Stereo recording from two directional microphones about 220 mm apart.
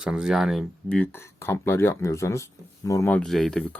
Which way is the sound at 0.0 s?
5° right (ahead or behind).